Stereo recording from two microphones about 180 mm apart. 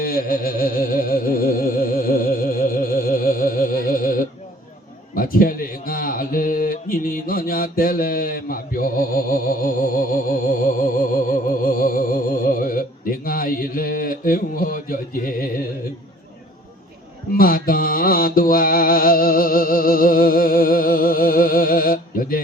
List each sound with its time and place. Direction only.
0.0 s music: 55° left (ahead or behind)
5.1 s a sound: 50° left (ahead or behind)
17.3 s mantra: 50° left (ahead or behind)